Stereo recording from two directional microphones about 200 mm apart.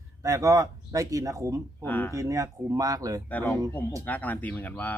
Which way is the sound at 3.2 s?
10° left (ahead or behind).